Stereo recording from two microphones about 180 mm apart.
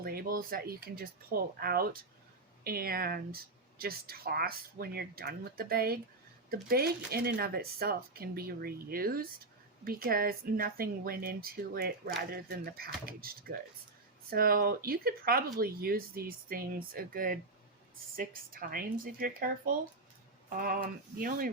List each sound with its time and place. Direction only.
0.0 s speech: 55° right (ahead or behind)